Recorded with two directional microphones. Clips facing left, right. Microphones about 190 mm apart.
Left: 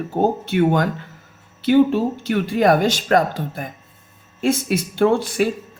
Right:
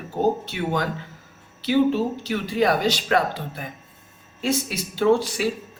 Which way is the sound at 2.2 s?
50° left (ahead or behind).